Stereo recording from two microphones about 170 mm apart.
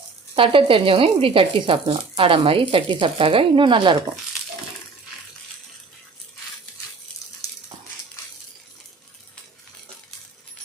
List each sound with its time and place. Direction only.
0.3 s speech: 30° right (ahead or behind)